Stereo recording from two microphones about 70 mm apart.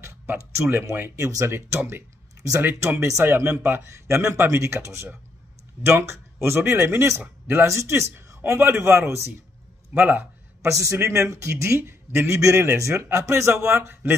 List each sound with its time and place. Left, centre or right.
0.6 s speech: right
1.1 s a man's voice: right
2.6 s a man's voice: right
7.2 s speech: right
7.6 s a man's voice: right
8.4 s speech: right
9.9 s a man's voice: right
10.6 s a man's voice: right